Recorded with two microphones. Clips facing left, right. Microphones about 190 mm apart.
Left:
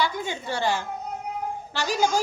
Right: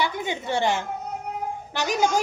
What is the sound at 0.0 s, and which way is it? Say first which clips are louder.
A woman's voice: right 1 dB; 20° right (ahead or behind).